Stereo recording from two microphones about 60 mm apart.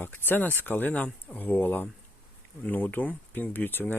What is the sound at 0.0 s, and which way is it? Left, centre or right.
Speech, left.